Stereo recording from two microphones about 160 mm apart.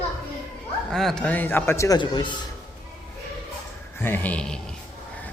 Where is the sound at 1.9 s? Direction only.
30° left (ahead or behind).